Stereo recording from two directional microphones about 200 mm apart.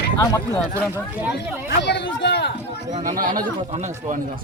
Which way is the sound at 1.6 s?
55° left (ahead or behind).